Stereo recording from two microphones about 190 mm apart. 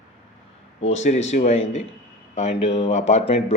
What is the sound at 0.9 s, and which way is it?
A man's voice, 35° left (ahead or behind).